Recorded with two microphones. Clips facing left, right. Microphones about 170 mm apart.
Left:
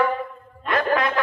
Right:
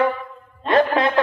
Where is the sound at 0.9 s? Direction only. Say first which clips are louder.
Right 4 dB; 25° right (ahead or behind).